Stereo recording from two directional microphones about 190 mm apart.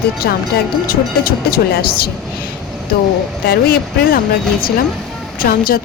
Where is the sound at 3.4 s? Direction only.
50° left (ahead or behind).